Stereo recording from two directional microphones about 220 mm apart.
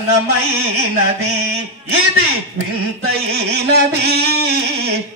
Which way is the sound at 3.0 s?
45° right (ahead or behind).